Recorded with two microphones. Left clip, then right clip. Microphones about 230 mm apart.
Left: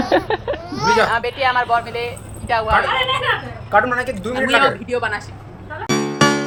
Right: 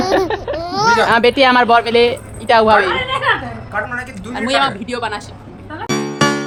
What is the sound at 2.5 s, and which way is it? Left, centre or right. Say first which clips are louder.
Speech: right 8 dB; right.